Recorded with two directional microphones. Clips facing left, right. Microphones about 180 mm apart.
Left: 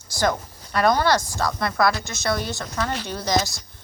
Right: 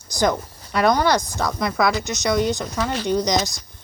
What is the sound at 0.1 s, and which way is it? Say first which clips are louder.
Speech: right 3 dB; 20° right (ahead or behind).